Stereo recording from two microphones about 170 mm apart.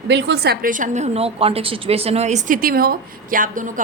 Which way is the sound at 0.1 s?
90° right.